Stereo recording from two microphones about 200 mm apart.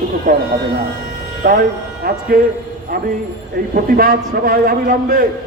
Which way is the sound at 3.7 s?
45° right (ahead or behind).